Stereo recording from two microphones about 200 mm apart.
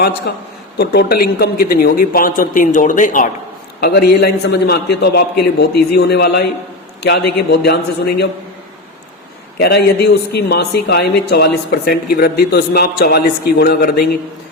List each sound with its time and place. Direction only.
0.3 s a man's voice: 55° left (ahead or behind)
3.8 s a man's voice: 55° left (ahead or behind)
9.6 s a man's voice: 55° left (ahead or behind)